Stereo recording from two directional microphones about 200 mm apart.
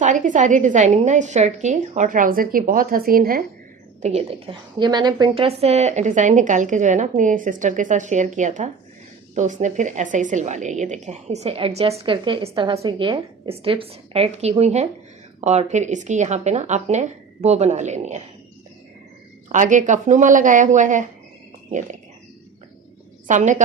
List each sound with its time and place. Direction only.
0.0 s a woman's voice: 40° right (ahead or behind)
4.0 s a woman's voice: 30° right (ahead or behind)
19.5 s a woman's voice: 40° right (ahead or behind)
23.2 s a woman's voice: 40° right (ahead or behind)